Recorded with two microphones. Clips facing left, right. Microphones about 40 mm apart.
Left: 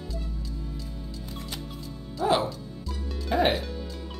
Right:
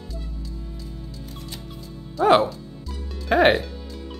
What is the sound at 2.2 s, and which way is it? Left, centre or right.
Speech, right.